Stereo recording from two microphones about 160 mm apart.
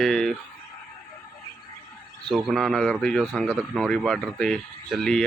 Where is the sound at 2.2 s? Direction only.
Centre (ahead or behind).